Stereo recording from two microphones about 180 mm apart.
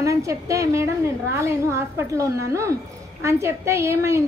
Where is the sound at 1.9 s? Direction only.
15° right (ahead or behind).